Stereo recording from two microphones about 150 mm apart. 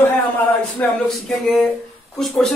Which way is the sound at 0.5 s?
10° left (ahead or behind).